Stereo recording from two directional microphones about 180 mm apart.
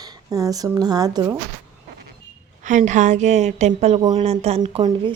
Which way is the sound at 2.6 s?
45° right (ahead or behind).